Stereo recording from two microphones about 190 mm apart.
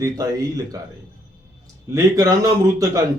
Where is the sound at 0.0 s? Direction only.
15° right (ahead or behind).